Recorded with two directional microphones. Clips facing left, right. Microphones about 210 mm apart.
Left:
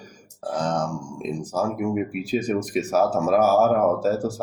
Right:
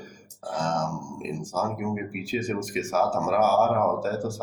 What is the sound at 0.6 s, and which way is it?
Speech, 35° left (ahead or behind).